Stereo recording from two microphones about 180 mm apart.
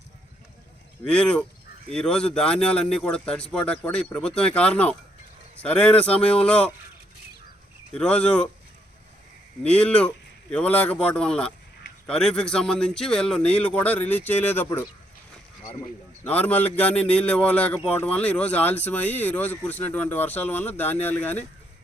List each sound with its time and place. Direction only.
1.0 s speech: 5° left (ahead or behind)
7.9 s speech: 5° left (ahead or behind)
9.6 s speech: 5° left (ahead or behind)
16.2 s speech: 10° left (ahead or behind)